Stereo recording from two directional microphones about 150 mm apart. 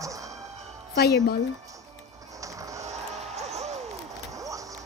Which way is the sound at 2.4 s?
20° right (ahead or behind).